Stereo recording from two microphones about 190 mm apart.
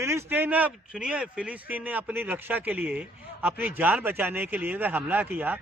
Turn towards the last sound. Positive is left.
turn(degrees=-10)  # may be behind; listen again after turning